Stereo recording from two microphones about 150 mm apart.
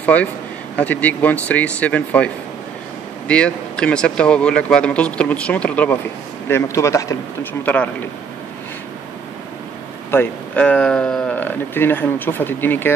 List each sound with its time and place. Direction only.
0.0 s speech: 10° left (ahead or behind)
6.5 s speech: 20° left (ahead or behind)
7.6 s speech: 10° left (ahead or behind)
10.1 s speech: 10° left (ahead or behind)